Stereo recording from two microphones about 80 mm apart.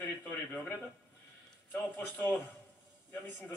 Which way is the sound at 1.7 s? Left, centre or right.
Left.